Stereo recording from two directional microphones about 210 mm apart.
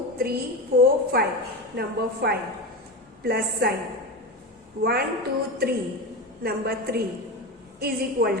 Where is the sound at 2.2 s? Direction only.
50° right (ahead or behind).